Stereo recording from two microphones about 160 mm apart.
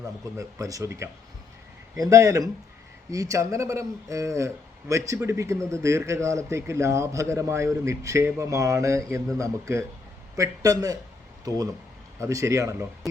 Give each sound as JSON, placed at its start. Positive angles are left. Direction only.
{"t": 0.3, "sound": "a man's voice", "side_deg": -20}